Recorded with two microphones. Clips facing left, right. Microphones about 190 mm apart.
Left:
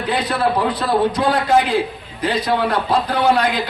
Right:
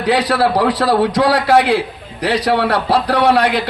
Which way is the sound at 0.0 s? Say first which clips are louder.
Right 5 dB; 90° right.